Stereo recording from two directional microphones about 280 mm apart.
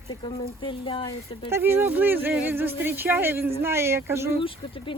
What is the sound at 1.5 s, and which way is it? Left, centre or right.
Speech, centre.